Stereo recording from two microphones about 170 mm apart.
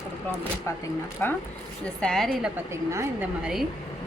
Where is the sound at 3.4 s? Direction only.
Centre (ahead or behind).